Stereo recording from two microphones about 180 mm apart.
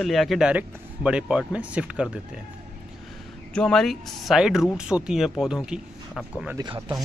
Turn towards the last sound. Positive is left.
turn(degrees=-25)  # may be behind; listen again after turning